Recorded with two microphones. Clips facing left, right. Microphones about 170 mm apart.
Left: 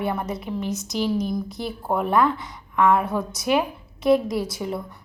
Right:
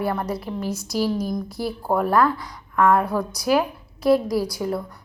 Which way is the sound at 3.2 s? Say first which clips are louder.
Right 2 dB; 20° left (ahead or behind).